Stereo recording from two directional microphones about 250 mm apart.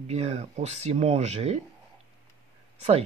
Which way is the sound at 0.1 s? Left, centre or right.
Right.